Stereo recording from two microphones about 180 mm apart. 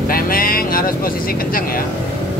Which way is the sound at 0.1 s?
55° left (ahead or behind).